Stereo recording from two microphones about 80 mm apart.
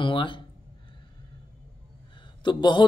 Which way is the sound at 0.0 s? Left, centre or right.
Left.